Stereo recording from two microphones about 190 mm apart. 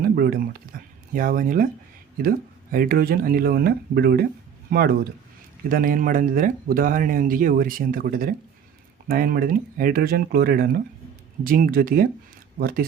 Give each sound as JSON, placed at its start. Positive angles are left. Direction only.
{"t": 0.0, "sound": "a sound", "side_deg": -50}
{"t": 1.1, "sound": "speech", "side_deg": -45}
{"t": 2.7, "sound": "speech", "side_deg": -50}